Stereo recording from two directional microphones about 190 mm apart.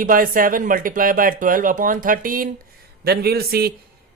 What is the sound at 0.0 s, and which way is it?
Speech, 45° right (ahead or behind).